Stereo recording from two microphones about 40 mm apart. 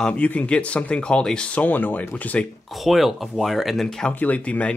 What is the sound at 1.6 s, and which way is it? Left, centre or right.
Speech, left.